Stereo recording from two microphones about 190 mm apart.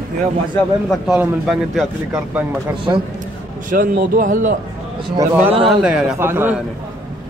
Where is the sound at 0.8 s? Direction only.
5° right (ahead or behind).